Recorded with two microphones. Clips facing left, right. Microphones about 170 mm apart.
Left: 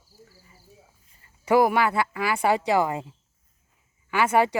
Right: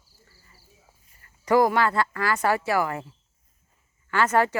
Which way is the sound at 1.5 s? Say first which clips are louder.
Even; 10° left (ahead or behind).